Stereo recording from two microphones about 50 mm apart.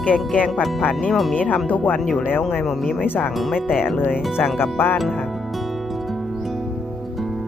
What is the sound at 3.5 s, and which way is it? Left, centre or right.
Speech, centre.